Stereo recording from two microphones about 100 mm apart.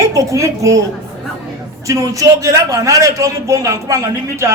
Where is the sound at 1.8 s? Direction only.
35° right (ahead or behind).